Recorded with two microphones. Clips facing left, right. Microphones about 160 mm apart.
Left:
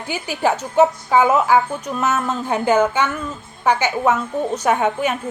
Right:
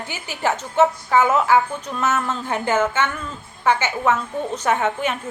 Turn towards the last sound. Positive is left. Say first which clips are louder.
# left 3 dB
turn(degrees=15)  # may be behind; listen again after turning